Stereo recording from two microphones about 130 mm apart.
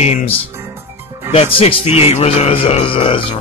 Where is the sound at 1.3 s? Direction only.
45° left (ahead or behind).